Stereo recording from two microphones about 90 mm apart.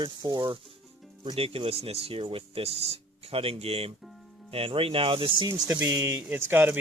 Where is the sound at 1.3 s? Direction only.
90° right.